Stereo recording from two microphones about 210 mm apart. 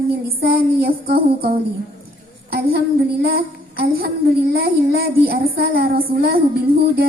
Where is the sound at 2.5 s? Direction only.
45° right (ahead or behind).